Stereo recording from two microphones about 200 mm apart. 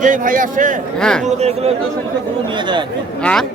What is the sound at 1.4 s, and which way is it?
Speech, 30° right (ahead or behind).